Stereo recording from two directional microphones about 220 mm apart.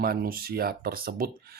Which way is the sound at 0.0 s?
40° right (ahead or behind).